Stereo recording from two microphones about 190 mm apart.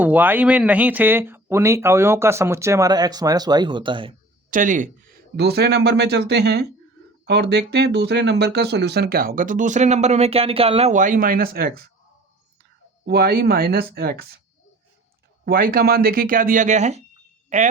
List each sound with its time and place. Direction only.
0.0 s speech: 10° right (ahead or behind); by 4.1 s 25° right (ahead or behind)
4.5 s speech: 45° right (ahead or behind)
13.1 s speech: 55° right (ahead or behind)
15.4 s a woman's voice: 50° right (ahead or behind)